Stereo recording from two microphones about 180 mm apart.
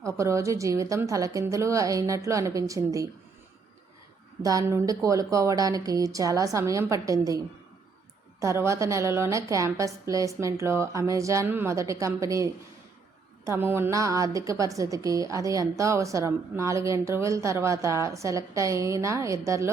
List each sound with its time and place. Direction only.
0.0 s a woman's voice: 15° right (ahead or behind)
4.4 s a woman's voice: 20° right (ahead or behind)